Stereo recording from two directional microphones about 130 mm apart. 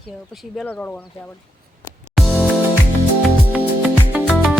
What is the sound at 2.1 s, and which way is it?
Music, centre (ahead or behind).